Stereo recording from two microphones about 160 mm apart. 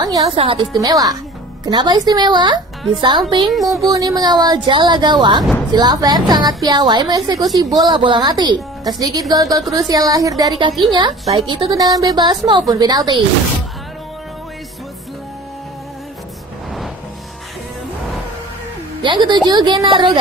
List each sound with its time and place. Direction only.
0.2 s a woman's voice: 35° right (ahead or behind)
0.7 s a woman's voice: 25° right (ahead or behind)
3.5 s music: centre (ahead or behind)
3.8 s a woman's voice: 25° right (ahead or behind)
19.0 s a woman's voice: 30° right (ahead or behind)